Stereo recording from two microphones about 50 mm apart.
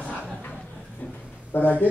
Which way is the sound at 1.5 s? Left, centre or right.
Left.